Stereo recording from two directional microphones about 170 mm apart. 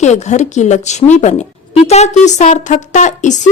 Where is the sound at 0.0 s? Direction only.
40° left (ahead or behind).